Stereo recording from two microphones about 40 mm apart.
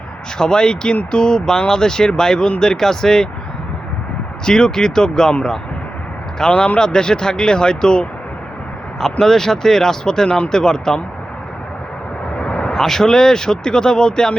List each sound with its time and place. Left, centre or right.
0.3 s speech: centre
4.4 s speech: centre
6.5 s speech: left
12.4 s vehicle: left
12.7 s speech: centre